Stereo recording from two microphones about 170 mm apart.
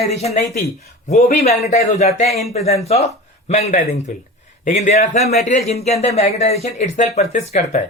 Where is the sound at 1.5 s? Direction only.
40° left (ahead or behind).